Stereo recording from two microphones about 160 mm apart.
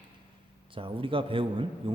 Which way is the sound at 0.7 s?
35° right (ahead or behind).